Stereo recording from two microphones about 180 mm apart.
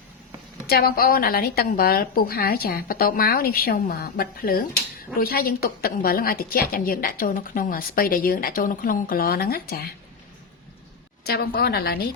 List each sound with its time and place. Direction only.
0.7 s a woman's voice: 60° left (ahead or behind)
11.2 s a woman's voice: 60° left (ahead or behind)